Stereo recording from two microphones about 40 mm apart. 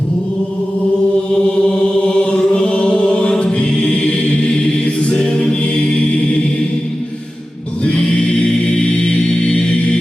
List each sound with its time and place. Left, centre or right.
2.0 s chant: left
5.1 s choir: centre
7.9 s choir: left